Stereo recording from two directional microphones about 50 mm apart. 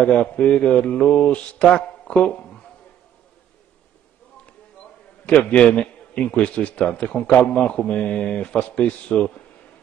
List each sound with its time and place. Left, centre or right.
0.0 s mantra: left
5.5 s mantra: left